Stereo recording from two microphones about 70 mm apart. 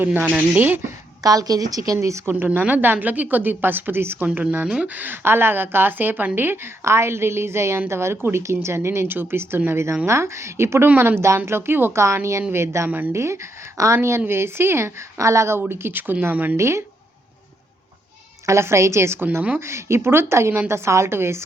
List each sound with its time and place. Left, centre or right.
0.0 s a woman's voice: right
1.2 s a woman's voice: right
2.0 s speech: right
2.3 s a woman's voice: right
4.6 s a woman's voice: centre
6.8 s a woman's voice: right
10.8 s a woman's voice: right
12.0 s a woman's voice: right
15.7 s a woman's voice: right
16.6 s speech: right
18.4 s a woman's voice: right
19.5 s a woman's voice: right